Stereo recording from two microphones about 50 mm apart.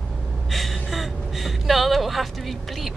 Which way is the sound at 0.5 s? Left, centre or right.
Centre.